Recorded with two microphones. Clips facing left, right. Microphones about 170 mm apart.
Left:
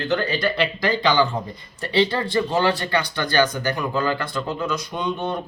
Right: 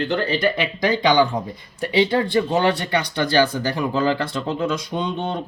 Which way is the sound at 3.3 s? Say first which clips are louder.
Right 1 dB; 30° right (ahead or behind).